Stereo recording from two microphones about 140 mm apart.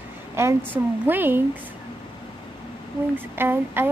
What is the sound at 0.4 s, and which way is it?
A woman's voice, 20° right (ahead or behind).